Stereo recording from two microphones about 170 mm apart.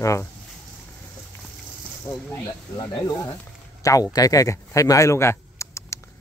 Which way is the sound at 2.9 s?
20° left (ahead or behind).